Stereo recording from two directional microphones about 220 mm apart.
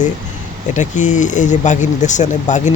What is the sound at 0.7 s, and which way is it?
Speech, 35° left (ahead or behind).